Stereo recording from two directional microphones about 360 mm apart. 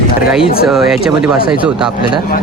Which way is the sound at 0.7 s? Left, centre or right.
Centre.